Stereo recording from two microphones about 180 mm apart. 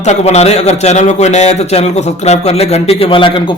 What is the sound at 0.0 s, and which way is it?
A man's voice, 40° left (ahead or behind).